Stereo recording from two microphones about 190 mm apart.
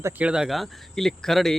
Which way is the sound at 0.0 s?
5° right (ahead or behind).